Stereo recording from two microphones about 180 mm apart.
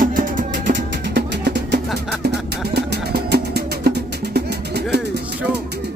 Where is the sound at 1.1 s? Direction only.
70° right (ahead or behind).